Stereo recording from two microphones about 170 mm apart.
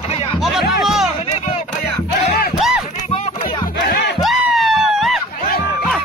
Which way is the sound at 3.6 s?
75° left (ahead or behind).